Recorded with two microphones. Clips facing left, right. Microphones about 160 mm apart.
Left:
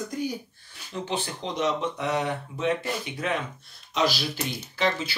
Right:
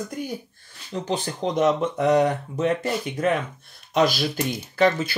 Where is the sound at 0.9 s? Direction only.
45° right (ahead or behind).